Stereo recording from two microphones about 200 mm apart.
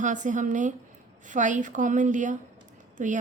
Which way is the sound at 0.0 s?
40° right (ahead or behind).